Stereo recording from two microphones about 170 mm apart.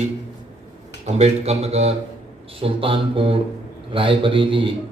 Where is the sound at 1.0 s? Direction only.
40° right (ahead or behind).